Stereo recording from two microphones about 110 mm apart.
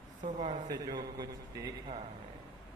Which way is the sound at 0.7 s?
35° right (ahead or behind).